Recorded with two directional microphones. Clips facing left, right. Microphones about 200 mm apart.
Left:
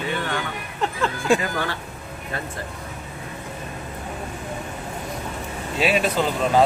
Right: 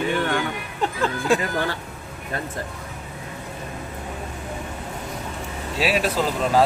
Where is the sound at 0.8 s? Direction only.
15° right (ahead or behind).